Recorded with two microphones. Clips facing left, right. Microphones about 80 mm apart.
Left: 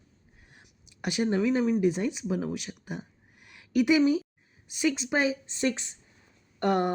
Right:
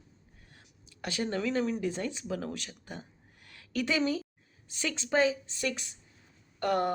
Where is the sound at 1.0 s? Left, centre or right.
Centre.